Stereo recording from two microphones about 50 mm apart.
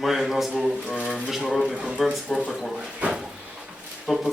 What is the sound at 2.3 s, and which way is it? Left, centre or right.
Speech, centre.